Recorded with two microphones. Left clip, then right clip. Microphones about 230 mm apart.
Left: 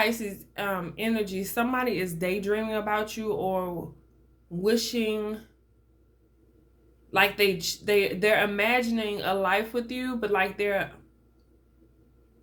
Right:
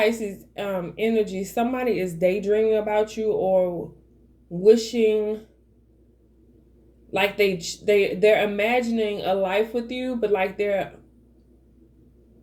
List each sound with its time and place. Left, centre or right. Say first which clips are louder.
0.2 s speech: right 3 dB; left
4.8 s speech: right 8 dB; left
7.1 s speech: right 1 dB; left